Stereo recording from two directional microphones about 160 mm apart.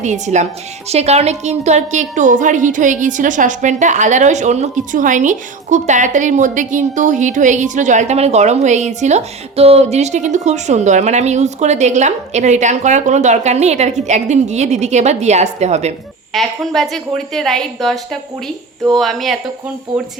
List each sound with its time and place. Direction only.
0.0 s a woman's voice: 50° right (ahead or behind)
16.3 s a woman's voice: centre (ahead or behind)